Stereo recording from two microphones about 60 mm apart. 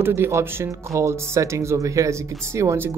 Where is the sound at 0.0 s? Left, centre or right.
Right.